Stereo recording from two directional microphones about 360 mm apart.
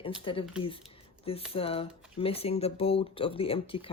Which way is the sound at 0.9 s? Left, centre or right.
Centre.